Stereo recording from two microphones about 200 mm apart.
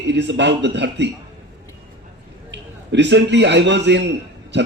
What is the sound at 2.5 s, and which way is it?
A man's voice, 60° right (ahead or behind).